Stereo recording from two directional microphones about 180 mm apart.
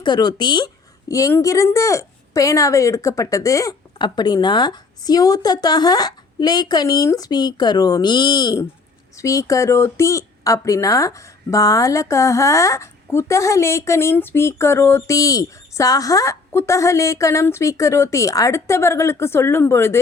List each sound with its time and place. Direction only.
0.0 s a woman's voice: 25° left (ahead or behind)